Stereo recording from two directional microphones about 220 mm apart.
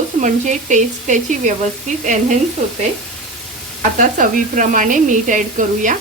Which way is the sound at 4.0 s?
35° right (ahead or behind).